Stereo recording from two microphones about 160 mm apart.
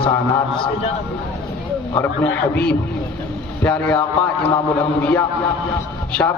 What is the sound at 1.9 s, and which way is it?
Speech, 10° left (ahead or behind).